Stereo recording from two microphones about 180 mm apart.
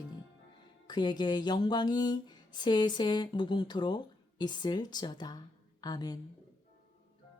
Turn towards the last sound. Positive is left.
turn(degrees=20)  # may be behind; listen again after turning